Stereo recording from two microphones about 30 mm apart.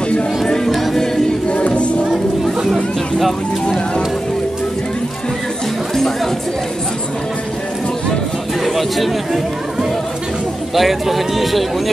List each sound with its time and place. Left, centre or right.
1.5 s music: left
2.4 s music: centre
8.6 s speech: centre
10.7 s speech: centre